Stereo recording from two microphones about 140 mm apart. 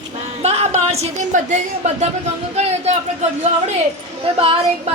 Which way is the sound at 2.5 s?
50° right (ahead or behind).